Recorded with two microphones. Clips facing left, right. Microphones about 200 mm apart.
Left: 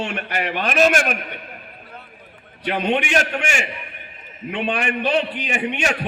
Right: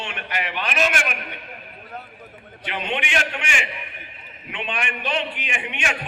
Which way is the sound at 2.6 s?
40° left (ahead or behind).